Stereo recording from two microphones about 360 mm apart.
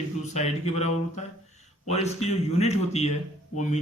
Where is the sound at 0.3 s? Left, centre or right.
Centre.